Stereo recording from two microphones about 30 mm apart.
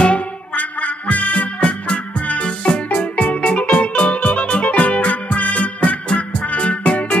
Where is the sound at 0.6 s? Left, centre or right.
Left.